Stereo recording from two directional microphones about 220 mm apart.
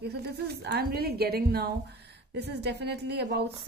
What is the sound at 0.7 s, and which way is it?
A woman's voice, 45° right (ahead or behind).